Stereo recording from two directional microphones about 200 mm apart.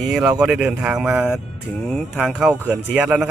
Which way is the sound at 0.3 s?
5° right (ahead or behind).